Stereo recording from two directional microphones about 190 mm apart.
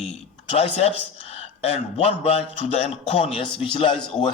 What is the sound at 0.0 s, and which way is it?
Speech, 35° left (ahead or behind).